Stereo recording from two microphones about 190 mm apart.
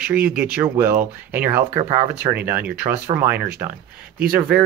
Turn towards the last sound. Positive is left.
turn(degrees=-5)  # may be behind; listen again after turning